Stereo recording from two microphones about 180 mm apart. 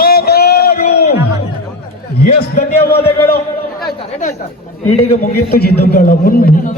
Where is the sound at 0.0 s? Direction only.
60° left (ahead or behind).